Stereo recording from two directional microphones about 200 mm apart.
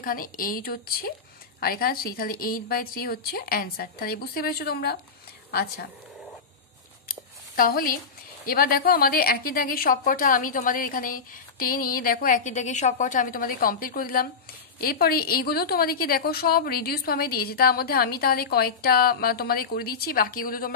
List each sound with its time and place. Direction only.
0.0 s a woman's voice: 45° left (ahead or behind)
7.1 s a sound: 45° left (ahead or behind)
8.5 s a woman's voice: 45° left (ahead or behind)